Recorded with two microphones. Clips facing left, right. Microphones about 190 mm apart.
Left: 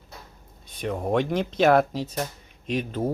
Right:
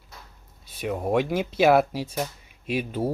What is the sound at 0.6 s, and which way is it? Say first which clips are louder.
Speech: even; 5° right (ahead or behind).